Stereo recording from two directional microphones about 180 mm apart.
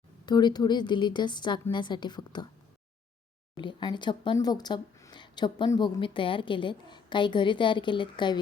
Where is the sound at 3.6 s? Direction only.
25° left (ahead or behind).